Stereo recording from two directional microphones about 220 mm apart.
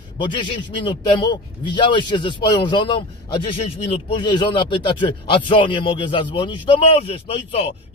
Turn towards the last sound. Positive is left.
turn(degrees=25)  # may be behind; listen again after turning